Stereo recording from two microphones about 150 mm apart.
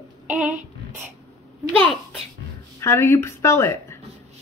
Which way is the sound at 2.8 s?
15° left (ahead or behind).